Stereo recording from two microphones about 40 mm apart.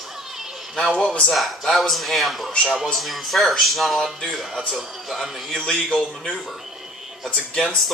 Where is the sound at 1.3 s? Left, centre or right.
Centre.